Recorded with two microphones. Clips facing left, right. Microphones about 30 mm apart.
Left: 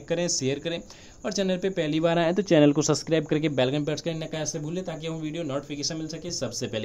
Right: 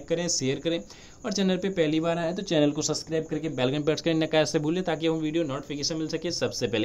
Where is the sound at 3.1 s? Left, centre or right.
Left.